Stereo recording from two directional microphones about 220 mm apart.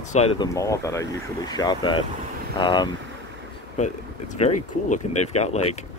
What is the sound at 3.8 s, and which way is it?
Speech, 35° left (ahead or behind).